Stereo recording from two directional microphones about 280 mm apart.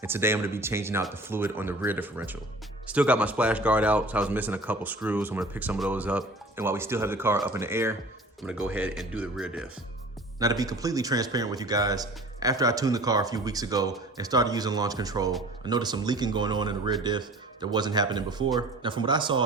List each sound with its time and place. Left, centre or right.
0.0 s a man's voice: centre